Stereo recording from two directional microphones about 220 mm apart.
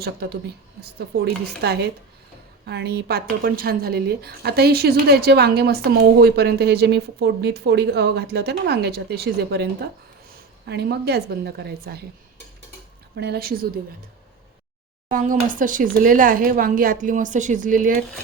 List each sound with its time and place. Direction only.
0.0 s speech: 45° right (ahead or behind)
10.7 s speech: 50° right (ahead or behind)
13.1 s speech: 50° right (ahead or behind)
15.1 s speech: 35° right (ahead or behind)